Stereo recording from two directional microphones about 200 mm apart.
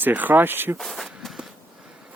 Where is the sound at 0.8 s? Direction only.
Centre (ahead or behind).